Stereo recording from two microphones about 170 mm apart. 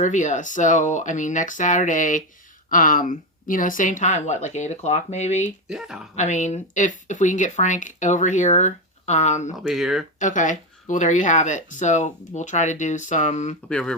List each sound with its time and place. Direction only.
0.0 s speech: 45° left (ahead or behind)
5.6 s speech: 5° right (ahead or behind)
6.1 s speech: 45° left (ahead or behind)
9.6 s speech: centre (ahead or behind)
10.2 s speech: 50° left (ahead or behind)
13.7 s speech: 5° left (ahead or behind)